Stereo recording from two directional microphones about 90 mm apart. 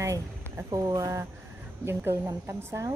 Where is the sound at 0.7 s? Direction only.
40° right (ahead or behind).